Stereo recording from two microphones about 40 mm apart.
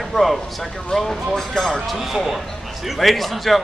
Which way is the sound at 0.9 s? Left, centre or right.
Centre.